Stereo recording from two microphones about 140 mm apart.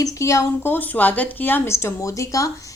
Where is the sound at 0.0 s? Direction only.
20° left (ahead or behind).